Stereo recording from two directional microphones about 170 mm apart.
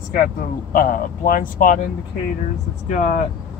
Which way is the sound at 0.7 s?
55° left (ahead or behind).